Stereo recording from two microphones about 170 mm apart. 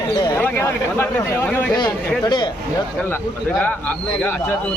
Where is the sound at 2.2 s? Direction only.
25° left (ahead or behind).